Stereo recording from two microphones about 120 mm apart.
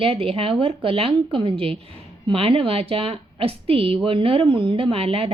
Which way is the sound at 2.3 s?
55° right (ahead or behind).